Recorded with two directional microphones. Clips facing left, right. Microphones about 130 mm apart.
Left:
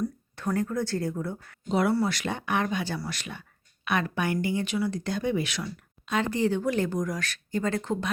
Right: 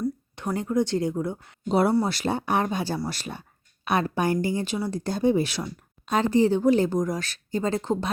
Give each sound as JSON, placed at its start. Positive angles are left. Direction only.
{"t": 0.3, "sound": "speech", "side_deg": -25}
{"t": 1.6, "sound": "speech", "side_deg": -35}